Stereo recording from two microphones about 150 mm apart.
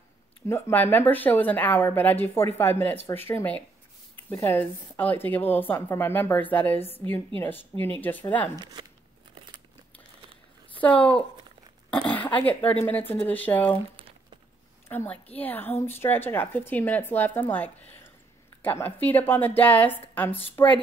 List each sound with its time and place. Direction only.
0.5 s a woman's voice: 15° left (ahead or behind)
10.2 s a sound: 35° right (ahead or behind)
10.8 s a woman's voice: 10° left (ahead or behind)
14.9 s a woman's voice: 10° left (ahead or behind)